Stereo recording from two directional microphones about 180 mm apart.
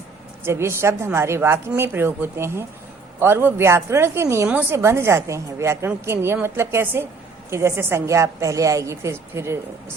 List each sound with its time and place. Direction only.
0.4 s a woman's voice: 15° right (ahead or behind)